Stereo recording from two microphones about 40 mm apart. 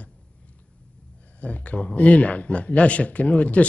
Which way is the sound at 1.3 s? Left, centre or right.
Left.